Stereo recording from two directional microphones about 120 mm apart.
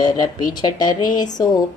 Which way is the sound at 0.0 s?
35° left (ahead or behind).